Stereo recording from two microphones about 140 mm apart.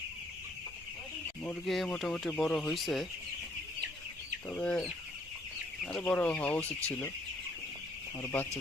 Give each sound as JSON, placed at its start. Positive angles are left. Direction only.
{"t": 1.6, "sound": "speech", "side_deg": 0}
{"t": 4.4, "sound": "speech", "side_deg": 10}
{"t": 8.2, "sound": "speech", "side_deg": 15}